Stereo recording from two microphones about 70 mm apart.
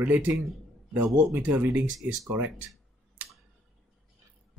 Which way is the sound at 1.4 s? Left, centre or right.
Centre.